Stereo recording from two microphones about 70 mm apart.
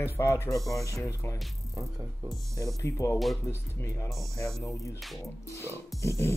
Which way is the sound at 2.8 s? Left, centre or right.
Left.